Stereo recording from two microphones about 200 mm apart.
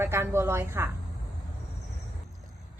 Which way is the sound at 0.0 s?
15° right (ahead or behind).